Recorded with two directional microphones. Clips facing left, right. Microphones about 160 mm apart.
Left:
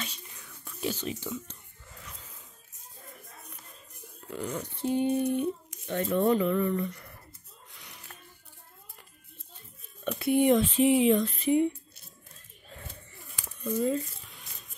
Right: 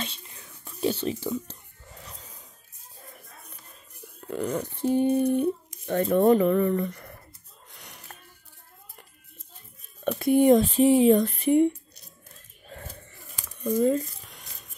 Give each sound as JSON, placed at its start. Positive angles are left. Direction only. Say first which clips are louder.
{"t": 0.0, "sound": "whispering", "louder": "right 4 dB", "side_deg": -30}
{"t": 4.3, "sound": "speech", "louder": "right 6 dB", "side_deg": -50}
{"t": 10.0, "sound": "speech", "louder": "right 5 dB", "side_deg": -40}
{"t": 11.2, "sound": "speech", "louder": "right 4 dB", "side_deg": -60}
{"t": 13.7, "sound": "speech", "louder": "right 5 dB", "side_deg": -45}